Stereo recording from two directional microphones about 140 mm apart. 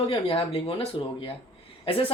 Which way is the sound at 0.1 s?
40° left (ahead or behind).